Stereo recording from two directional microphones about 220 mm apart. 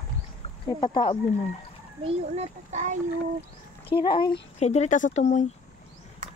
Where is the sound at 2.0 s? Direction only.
30° right (ahead or behind).